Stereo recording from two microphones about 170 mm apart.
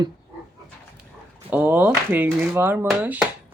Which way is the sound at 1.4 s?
10° right (ahead or behind).